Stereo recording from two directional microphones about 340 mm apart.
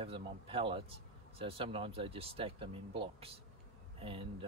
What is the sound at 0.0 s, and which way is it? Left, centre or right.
Speech, centre.